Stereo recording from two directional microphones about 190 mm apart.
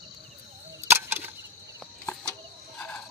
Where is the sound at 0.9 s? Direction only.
10° right (ahead or behind).